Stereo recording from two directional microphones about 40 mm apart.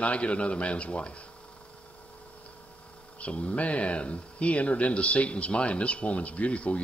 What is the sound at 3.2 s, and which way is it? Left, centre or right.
Speech, left.